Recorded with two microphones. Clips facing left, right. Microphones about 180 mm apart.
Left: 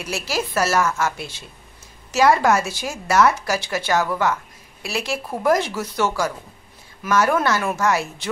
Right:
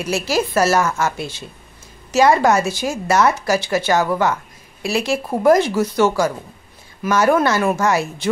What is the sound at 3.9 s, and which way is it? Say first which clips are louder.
Speech: right 1 dB; 25° right (ahead or behind).